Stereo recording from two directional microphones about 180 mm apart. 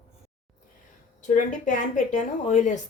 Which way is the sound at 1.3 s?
45° left (ahead or behind).